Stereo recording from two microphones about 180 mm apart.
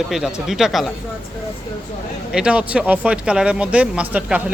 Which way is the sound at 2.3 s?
5° right (ahead or behind).